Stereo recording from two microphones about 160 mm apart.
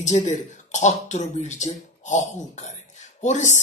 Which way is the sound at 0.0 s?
50° left (ahead or behind).